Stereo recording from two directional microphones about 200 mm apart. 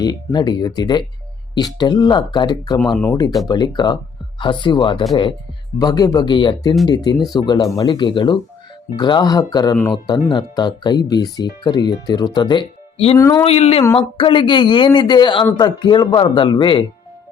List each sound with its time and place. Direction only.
0.0 s speech: 20° left (ahead or behind)
13.1 s speech: 15° left (ahead or behind)
13.4 s speech: 30° left (ahead or behind)